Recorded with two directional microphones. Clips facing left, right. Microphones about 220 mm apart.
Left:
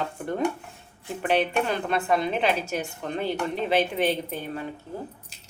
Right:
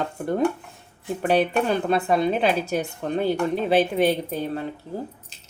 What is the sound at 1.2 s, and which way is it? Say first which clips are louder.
Speech: right 3 dB; 35° right (ahead or behind).